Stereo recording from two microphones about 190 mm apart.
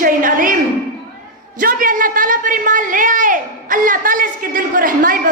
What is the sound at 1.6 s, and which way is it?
A man's voice, 45° right (ahead or behind).